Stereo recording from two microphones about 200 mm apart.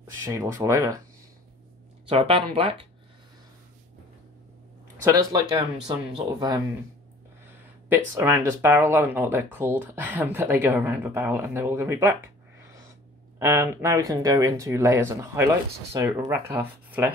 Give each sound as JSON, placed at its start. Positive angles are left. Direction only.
{"t": 0.2, "sound": "speech", "side_deg": -15}
{"t": 2.0, "sound": "speech", "side_deg": -30}
{"t": 5.0, "sound": "speech", "side_deg": -20}
{"t": 7.9, "sound": "speech", "side_deg": -10}